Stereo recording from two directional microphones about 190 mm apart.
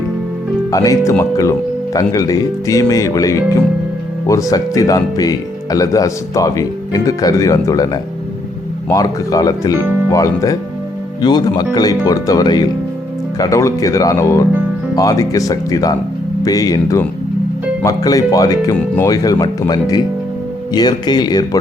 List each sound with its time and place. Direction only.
0.7 s speech: 20° left (ahead or behind)
8.9 s speech: 20° left (ahead or behind)